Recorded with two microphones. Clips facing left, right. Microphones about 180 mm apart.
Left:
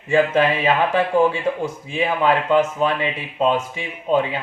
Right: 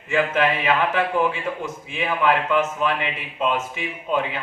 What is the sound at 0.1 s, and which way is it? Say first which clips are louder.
Speech: left 4 dB; 30° left (ahead or behind).